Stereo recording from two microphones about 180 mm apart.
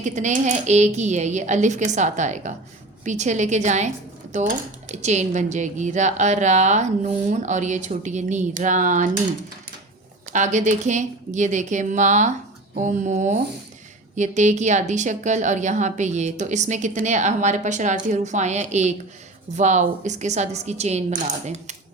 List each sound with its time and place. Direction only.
0.0 s speech: 40° right (ahead or behind)
10.3 s speech: 40° right (ahead or behind)